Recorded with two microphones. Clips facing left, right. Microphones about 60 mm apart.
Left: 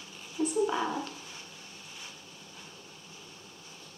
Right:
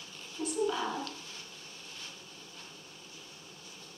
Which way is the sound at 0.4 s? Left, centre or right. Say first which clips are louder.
Left 4 dB; left.